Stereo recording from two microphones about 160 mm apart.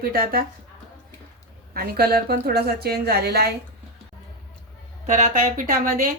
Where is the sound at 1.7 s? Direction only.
70° right (ahead or behind); by 3.5 s 90° right.